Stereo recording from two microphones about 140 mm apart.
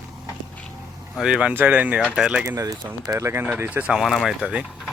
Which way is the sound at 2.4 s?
25° right (ahead or behind).